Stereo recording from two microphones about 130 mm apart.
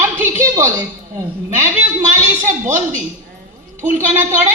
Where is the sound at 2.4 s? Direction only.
20° right (ahead or behind).